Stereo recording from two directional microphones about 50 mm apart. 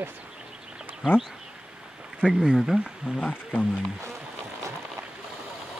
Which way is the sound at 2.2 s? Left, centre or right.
Centre.